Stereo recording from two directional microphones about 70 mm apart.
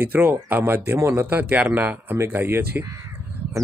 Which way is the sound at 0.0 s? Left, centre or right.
Right.